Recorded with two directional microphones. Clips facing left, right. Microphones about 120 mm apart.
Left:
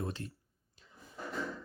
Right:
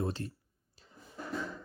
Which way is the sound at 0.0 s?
30° right (ahead or behind).